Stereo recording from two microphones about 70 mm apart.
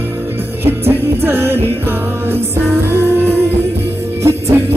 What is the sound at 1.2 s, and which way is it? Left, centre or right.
Music, right.